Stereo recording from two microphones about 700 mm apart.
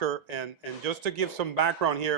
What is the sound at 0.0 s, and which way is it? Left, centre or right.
Speech, right.